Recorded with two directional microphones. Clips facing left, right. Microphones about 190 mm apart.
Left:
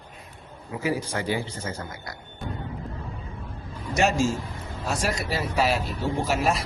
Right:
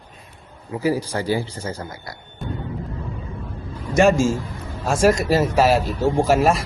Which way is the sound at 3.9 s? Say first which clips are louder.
Right 7 dB; 50° right (ahead or behind).